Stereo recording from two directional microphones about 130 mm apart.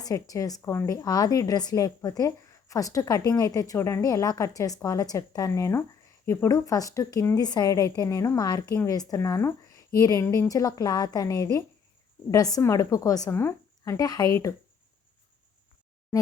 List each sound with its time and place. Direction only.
0.0 s a woman's voice: 25° left (ahead or behind)